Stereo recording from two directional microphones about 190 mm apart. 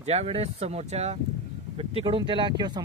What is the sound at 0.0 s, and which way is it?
Speech, 35° right (ahead or behind).